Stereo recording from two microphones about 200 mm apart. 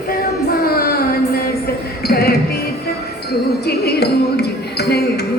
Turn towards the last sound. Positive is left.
turn(degrees=55)  # may be behind; listen again after turning